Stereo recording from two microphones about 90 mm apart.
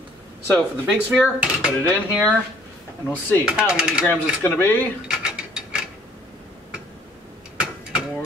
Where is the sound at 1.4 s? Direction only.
10° right (ahead or behind).